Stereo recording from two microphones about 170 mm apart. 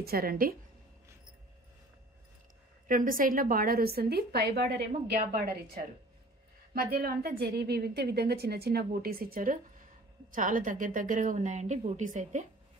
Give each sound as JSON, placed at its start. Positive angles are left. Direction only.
{"t": 0.0, "sound": "a woman's voice", "side_deg": -60}
{"t": 2.9, "sound": "a woman's voice", "side_deg": -55}